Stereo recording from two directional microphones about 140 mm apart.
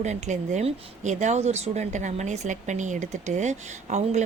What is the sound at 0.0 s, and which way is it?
Speech, 55° right (ahead or behind).